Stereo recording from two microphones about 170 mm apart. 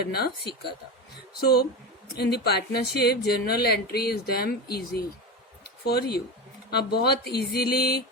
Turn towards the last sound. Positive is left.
turn(degrees=65)  # may be behind; listen again after turning